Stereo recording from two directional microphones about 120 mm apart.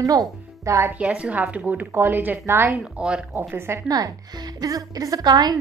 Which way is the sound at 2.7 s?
5° right (ahead or behind).